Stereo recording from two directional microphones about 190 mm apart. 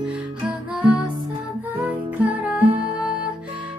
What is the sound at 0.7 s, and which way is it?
Music, 5° right (ahead or behind).